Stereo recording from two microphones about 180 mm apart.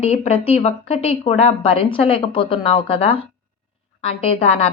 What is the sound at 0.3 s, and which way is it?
A woman's voice, 30° left (ahead or behind).